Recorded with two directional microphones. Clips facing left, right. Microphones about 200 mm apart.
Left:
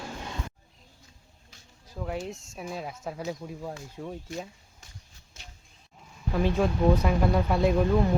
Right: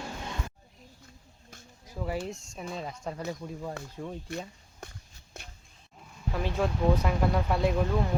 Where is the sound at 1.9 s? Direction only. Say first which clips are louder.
Even; 5° right (ahead or behind).